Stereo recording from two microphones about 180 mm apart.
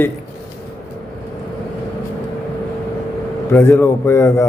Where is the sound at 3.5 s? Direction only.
15° left (ahead or behind).